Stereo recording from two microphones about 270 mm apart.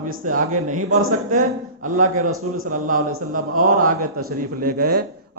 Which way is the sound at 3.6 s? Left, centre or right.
Right.